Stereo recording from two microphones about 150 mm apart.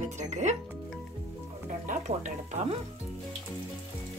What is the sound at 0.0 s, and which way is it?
Music, 55° right (ahead or behind).